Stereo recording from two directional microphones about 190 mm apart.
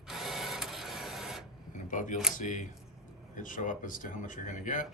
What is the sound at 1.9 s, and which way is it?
Speech, 40° left (ahead or behind).